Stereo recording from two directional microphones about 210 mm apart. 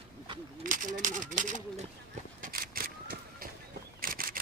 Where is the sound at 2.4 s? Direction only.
45° right (ahead or behind).